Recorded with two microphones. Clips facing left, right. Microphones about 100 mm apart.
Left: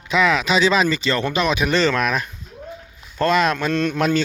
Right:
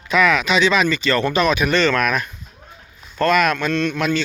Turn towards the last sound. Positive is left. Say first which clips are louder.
# left 1 dB
turn(degrees=35)  # may be behind; listen again after turning